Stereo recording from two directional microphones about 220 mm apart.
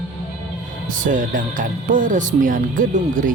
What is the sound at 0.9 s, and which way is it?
Speech, 35° right (ahead or behind).